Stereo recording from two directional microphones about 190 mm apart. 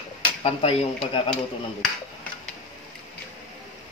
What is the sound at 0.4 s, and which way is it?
Speech, 30° left (ahead or behind).